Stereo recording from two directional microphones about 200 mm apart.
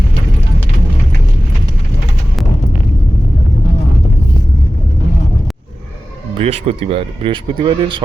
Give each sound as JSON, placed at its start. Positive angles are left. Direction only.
{"t": 6.3, "sound": "speech", "side_deg": -30}